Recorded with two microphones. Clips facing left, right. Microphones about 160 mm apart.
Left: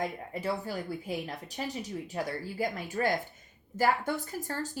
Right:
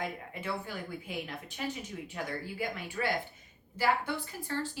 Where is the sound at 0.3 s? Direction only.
40° left (ahead or behind).